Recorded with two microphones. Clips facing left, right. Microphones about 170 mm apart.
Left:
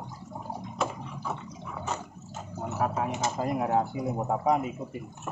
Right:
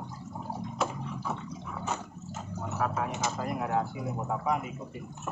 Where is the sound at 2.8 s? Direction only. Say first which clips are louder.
Left 2 dB; 20° left (ahead or behind).